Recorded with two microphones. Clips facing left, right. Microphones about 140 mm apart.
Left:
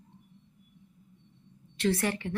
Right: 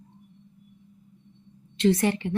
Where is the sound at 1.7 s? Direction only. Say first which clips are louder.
Right 6 dB; 20° right (ahead or behind).